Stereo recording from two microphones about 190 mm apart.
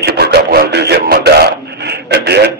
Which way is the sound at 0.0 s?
55° right (ahead or behind).